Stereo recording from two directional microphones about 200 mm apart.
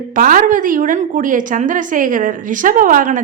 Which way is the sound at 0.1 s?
45° right (ahead or behind).